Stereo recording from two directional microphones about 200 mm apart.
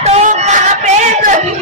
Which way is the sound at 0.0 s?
35° right (ahead or behind).